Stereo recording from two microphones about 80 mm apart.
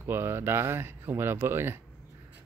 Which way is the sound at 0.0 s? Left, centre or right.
Right.